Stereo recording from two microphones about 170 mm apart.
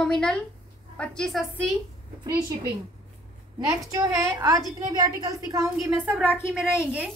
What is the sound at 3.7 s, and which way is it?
A woman's voice, 15° right (ahead or behind).